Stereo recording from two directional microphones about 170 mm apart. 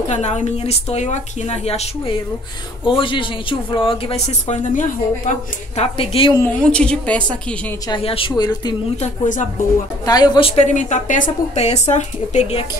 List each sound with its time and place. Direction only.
0.1 s a man's voice: 45° left (ahead or behind)
5.9 s a man's voice: 35° left (ahead or behind)
6.3 s a woman's voice: 10° left (ahead or behind)
7.9 s speech: 35° left (ahead or behind)
9.0 s speech: 45° left (ahead or behind)
10.0 s a man's voice: 25° left (ahead or behind); by 12.6 s 40° left (ahead or behind)